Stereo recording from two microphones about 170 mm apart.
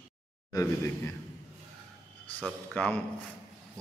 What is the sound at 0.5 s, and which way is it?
Speech, 15° left (ahead or behind).